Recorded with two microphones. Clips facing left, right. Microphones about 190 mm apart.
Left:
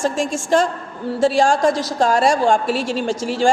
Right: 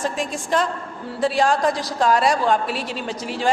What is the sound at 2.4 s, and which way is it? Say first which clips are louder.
Speech: left 4 dB; 30° left (ahead or behind).